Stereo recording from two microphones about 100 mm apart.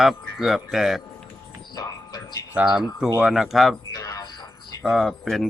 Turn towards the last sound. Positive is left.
turn(degrees=0)  # may be behind; listen again after turning